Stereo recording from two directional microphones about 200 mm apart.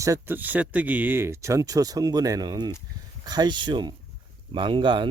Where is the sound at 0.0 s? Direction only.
15° right (ahead or behind).